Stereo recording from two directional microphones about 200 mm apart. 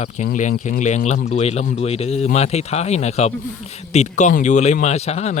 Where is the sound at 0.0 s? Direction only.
35° left (ahead or behind).